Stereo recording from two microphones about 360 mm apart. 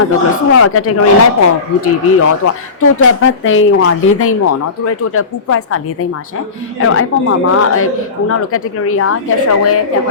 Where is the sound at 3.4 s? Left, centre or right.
Left.